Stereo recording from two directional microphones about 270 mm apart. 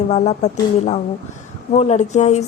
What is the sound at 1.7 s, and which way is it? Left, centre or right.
Speech, left.